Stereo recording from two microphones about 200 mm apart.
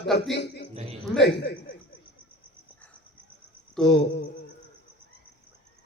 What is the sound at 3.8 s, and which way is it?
Speech, 60° left (ahead or behind).